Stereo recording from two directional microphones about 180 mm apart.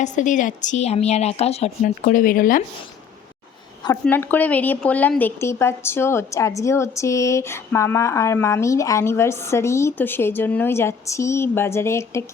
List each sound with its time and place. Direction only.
0.0 s speech: 45° left (ahead or behind)
4.0 s speech: 10° left (ahead or behind)